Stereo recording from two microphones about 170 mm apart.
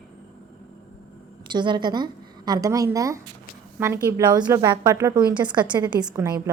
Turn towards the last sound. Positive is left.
turn(degrees=-20)  # may be behind; listen again after turning